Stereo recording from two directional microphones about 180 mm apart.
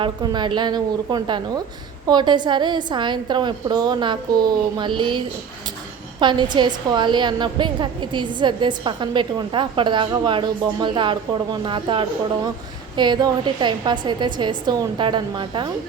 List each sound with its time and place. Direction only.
0.0 s a woman's voice: 25° right (ahead or behind)